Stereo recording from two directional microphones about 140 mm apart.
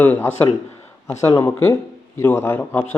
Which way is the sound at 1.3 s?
20° left (ahead or behind).